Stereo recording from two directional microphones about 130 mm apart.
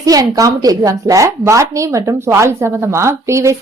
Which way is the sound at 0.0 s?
25° right (ahead or behind).